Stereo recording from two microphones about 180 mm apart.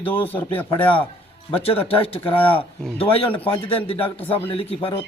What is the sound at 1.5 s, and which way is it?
A man's voice, 30° left (ahead or behind).